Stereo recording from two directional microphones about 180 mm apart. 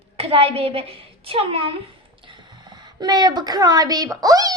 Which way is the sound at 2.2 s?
25° right (ahead or behind).